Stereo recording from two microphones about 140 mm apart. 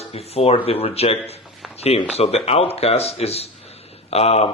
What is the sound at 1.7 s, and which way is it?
A man's voice, 45° left (ahead or behind).